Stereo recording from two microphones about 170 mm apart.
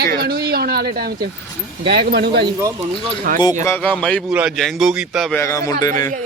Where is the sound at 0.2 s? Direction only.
65° right (ahead or behind).